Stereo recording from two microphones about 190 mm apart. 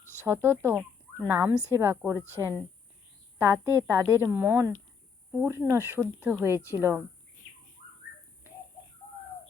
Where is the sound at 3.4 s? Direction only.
15° right (ahead or behind).